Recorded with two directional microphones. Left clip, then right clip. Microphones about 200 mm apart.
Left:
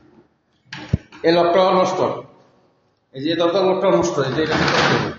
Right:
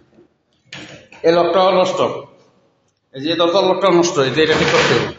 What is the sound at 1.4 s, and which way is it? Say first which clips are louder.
Speech: right 1 dB; 15° right (ahead or behind).